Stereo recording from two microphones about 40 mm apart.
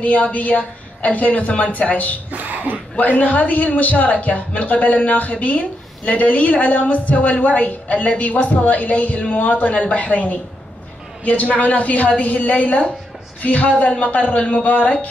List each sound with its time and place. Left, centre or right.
0.0 s a man's voice: left
2.3 s cough: right
3.0 s a man's voice: left